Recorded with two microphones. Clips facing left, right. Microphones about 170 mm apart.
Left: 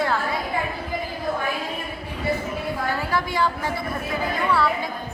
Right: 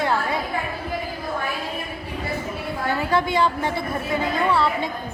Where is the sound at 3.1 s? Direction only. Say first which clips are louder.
Right 5 dB; 20° right (ahead or behind).